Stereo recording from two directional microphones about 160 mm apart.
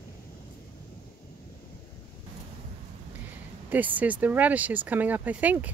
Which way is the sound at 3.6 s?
10° right (ahead or behind).